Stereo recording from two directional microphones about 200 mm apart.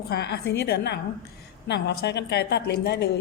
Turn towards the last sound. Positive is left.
turn(degrees=55)  # may be behind; listen again after turning